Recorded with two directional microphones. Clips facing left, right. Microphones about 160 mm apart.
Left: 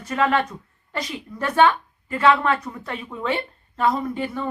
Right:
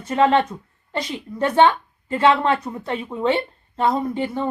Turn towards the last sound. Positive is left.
turn(degrees=-25)  # may be behind; listen again after turning